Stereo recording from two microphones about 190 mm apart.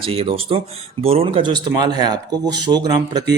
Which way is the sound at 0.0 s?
30° right (ahead or behind).